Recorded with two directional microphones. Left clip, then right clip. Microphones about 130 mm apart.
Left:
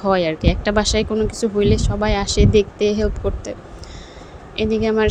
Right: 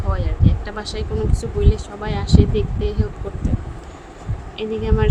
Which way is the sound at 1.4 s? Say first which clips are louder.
Left 6 dB; 45° left (ahead or behind).